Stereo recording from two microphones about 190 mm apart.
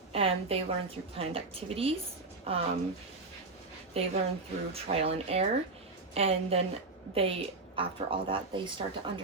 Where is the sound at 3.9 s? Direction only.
30° right (ahead or behind).